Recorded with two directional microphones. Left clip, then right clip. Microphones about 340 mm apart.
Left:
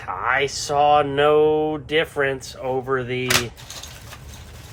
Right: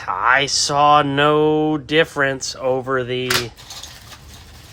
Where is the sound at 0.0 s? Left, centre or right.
Right.